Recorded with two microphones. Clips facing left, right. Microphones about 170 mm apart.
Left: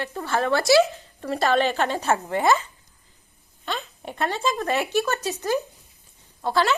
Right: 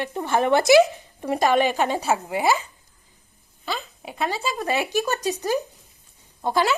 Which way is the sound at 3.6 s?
5° right (ahead or behind).